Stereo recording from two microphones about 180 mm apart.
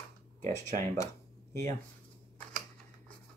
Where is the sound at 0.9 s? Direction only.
15° left (ahead or behind).